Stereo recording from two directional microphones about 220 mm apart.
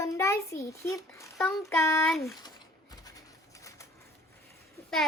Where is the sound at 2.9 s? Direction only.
15° left (ahead or behind).